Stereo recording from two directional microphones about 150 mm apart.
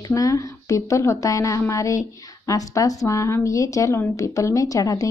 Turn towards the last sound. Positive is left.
turn(degrees=25)  # may be behind; listen again after turning